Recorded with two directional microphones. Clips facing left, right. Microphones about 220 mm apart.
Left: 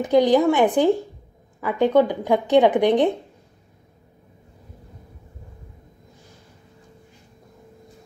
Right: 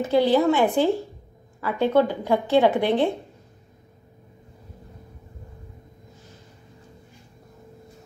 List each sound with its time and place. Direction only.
0.0 s a woman's voice: 15° left (ahead or behind)